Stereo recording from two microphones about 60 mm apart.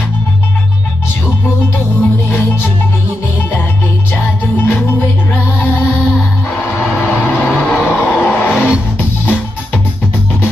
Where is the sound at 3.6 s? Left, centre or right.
Left.